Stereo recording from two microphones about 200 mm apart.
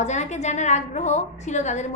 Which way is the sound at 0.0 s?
35° left (ahead or behind).